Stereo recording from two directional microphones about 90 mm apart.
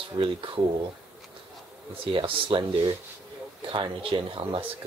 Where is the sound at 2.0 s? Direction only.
80° right.